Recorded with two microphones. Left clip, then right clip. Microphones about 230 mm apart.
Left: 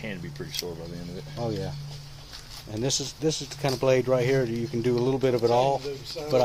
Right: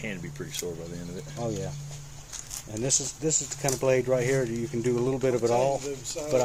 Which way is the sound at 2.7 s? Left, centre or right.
Left.